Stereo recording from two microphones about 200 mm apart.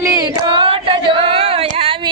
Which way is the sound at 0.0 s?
20° right (ahead or behind).